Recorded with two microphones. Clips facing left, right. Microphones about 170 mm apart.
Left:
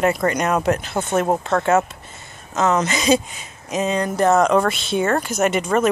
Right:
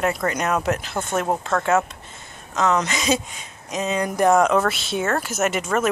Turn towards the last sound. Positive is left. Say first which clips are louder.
# left 3 dB
turn(degrees=0)  # may be behind; listen again after turning